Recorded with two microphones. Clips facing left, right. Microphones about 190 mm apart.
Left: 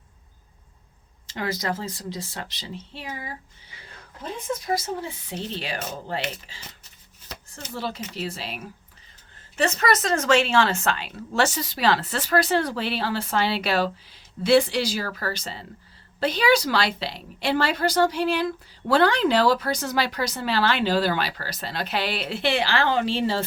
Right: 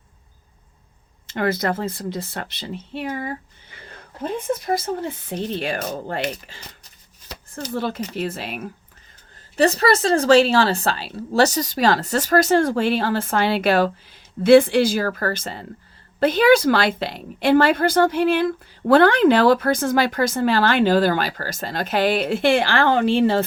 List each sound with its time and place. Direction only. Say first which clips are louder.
1.3 s a woman's voice: right 6 dB; 55° right (ahead or behind)
7.7 s a woman's voice: right 6 dB; 50° right (ahead or behind)
9.6 s a woman's voice: right 6 dB; 35° right (ahead or behind); by 23.5 s 55° right (ahead or behind)